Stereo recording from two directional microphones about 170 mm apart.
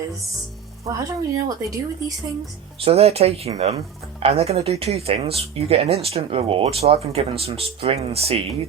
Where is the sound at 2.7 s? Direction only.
35° right (ahead or behind).